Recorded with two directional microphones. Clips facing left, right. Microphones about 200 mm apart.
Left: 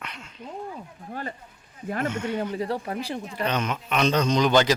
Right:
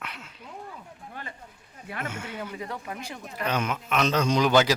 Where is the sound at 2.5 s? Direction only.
35° left (ahead or behind).